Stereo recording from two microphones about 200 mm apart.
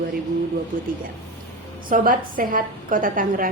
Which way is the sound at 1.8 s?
45° right (ahead or behind).